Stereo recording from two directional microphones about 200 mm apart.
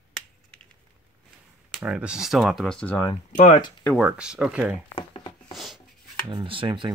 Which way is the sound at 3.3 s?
40° left (ahead or behind).